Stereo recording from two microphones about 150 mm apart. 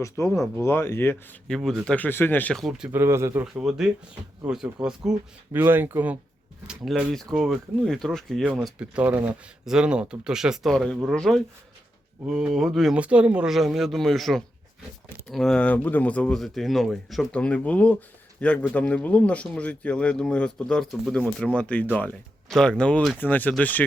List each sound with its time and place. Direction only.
0.0 s speech: 20° left (ahead or behind)
1.5 s speech: centre (ahead or behind)
1.9 s speech: 10° left (ahead or behind); by 3.0 s 5° right (ahead or behind)
3.0 s speech: 15° right (ahead or behind)
3.6 s speech: 5° right (ahead or behind)